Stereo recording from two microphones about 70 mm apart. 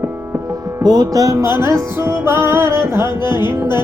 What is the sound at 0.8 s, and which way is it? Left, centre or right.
Music, right.